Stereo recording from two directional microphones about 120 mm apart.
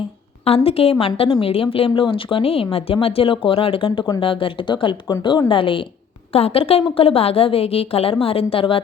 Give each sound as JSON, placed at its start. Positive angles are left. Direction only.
{"t": 0.4, "sound": "a woman's voice", "side_deg": 55}